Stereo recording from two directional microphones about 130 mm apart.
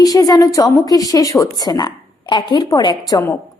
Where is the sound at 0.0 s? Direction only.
30° left (ahead or behind).